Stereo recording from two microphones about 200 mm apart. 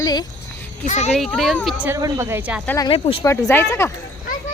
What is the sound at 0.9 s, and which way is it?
Speech, 35° left (ahead or behind).